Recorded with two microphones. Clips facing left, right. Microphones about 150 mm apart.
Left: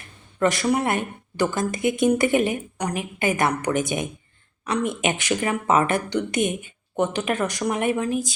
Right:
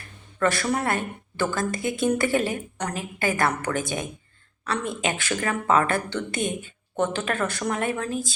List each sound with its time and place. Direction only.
0.3 s speech: 20° left (ahead or behind)